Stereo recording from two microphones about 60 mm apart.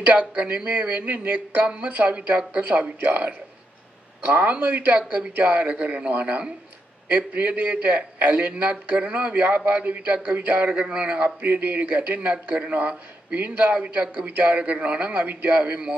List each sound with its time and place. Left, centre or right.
0.0 s a man's voice: right